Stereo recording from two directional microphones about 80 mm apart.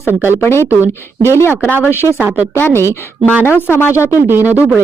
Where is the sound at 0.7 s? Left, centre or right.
Right.